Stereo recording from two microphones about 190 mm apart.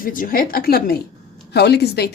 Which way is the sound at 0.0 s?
45° left (ahead or behind).